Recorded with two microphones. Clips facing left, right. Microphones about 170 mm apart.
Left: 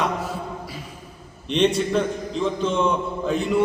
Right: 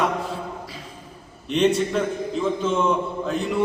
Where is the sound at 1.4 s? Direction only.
Centre (ahead or behind).